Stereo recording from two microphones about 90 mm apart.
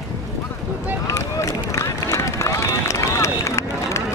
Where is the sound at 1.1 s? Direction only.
35° left (ahead or behind).